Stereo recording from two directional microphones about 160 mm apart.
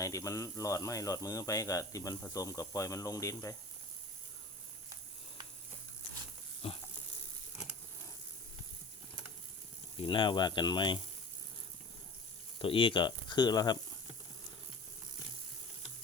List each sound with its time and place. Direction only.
0.0 s speech: 20° left (ahead or behind)
6.6 s a sound: 35° left (ahead or behind)
10.0 s speech: 30° left (ahead or behind)
12.5 s speech: 35° left (ahead or behind)